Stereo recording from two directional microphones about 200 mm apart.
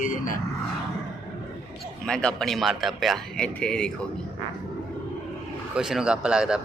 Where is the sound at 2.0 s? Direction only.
5° left (ahead or behind).